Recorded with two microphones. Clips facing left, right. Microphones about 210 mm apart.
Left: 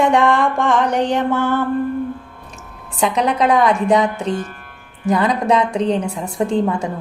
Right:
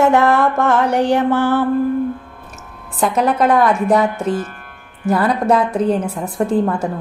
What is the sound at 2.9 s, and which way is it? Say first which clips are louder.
Mantra: right 1 dB; centre (ahead or behind).